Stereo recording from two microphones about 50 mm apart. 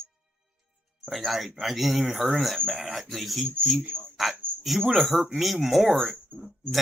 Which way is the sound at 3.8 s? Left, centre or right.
Right.